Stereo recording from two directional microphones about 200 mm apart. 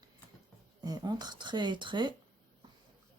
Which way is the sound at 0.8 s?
20° right (ahead or behind).